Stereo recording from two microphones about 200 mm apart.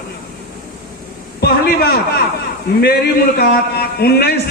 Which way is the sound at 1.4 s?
50° left (ahead or behind).